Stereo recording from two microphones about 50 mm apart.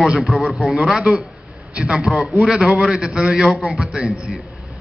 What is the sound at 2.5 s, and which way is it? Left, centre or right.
A man's voice, centre.